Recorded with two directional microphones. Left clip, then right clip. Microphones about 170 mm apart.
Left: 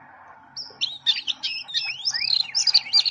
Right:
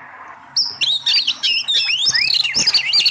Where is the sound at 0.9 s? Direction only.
20° right (ahead or behind).